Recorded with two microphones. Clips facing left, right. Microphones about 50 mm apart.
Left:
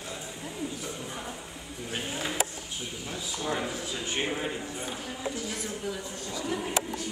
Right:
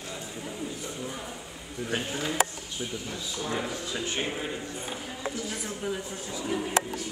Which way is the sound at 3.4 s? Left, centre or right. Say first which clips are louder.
Left 1 dB; centre.